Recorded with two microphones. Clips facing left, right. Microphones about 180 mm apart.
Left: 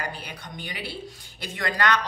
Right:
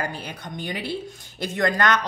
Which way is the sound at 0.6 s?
45° right (ahead or behind).